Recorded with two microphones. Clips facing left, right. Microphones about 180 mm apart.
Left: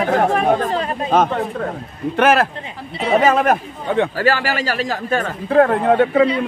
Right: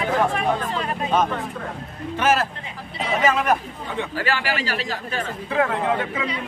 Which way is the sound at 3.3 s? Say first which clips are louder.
Left 5 dB; 50° left (ahead or behind).